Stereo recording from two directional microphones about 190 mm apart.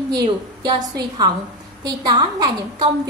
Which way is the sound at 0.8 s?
20° right (ahead or behind).